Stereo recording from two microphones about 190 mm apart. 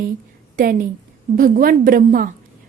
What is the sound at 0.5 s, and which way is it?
A woman's voice, 50° right (ahead or behind).